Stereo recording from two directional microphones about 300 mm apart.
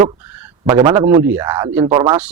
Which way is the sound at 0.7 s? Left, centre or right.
Centre.